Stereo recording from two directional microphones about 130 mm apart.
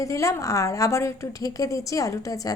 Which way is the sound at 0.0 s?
25° left (ahead or behind).